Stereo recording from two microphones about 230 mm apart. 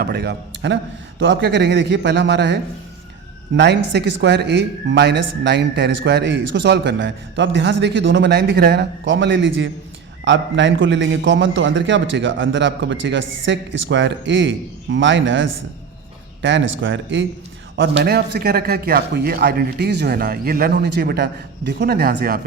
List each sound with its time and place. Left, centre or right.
0.0 s a man's voice: right